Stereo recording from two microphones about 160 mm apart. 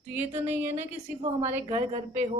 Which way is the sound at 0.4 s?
10° right (ahead or behind).